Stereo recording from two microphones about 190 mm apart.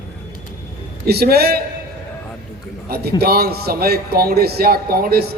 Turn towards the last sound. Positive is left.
turn(degrees=-55)  # may be behind; listen again after turning